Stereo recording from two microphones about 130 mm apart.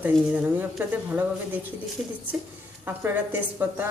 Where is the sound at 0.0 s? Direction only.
15° right (ahead or behind).